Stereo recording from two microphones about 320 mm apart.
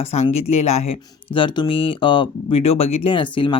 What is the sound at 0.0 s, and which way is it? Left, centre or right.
Speech, centre.